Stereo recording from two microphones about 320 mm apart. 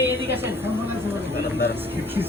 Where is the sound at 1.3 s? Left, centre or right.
Left.